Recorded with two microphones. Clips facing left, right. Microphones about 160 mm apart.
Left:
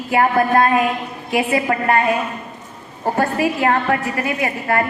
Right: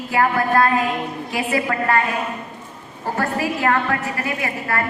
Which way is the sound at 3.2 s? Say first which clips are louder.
Left 4 dB; 20° left (ahead or behind).